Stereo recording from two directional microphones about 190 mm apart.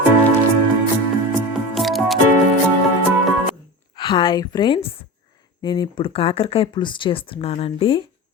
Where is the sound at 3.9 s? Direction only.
25° left (ahead or behind).